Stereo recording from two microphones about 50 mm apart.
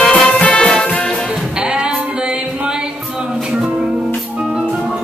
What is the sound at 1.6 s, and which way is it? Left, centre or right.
Singing, centre.